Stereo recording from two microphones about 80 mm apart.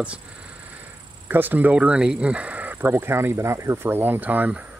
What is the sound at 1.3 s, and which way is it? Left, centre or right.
Speech, right.